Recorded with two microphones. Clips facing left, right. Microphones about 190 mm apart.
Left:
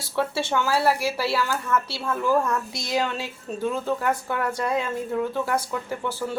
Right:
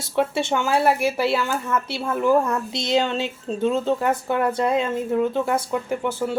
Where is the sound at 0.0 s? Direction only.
20° right (ahead or behind).